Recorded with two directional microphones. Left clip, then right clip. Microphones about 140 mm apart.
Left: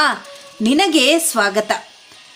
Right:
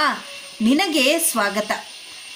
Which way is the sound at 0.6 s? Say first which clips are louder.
Left 4 dB; 20° left (ahead or behind).